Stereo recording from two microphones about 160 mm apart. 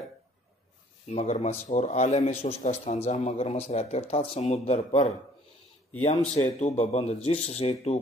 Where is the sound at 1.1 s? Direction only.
45° left (ahead or behind).